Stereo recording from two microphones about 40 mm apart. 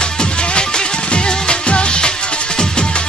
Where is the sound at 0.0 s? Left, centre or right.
Left.